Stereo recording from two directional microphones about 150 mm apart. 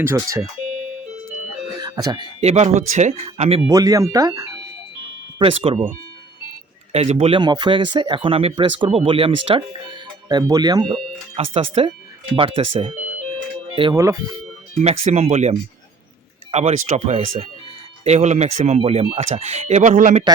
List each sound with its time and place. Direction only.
0.0 s speech: 20° right (ahead or behind)
1.8 s speech: 30° right (ahead or behind)
2.4 s speech: 45° right (ahead or behind)
3.7 s speech: 20° right (ahead or behind)
5.4 s speech: 40° right (ahead or behind)
6.9 s speech: 45° right (ahead or behind)
13.9 s speech: 20° right (ahead or behind)
14.8 s speech: 45° right (ahead or behind)